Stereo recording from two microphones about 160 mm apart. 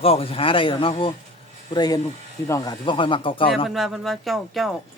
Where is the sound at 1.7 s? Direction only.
25° left (ahead or behind).